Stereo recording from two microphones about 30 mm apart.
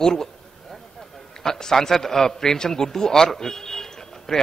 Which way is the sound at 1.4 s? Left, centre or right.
Centre.